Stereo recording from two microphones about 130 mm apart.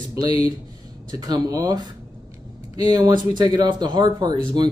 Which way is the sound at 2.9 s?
35° right (ahead or behind).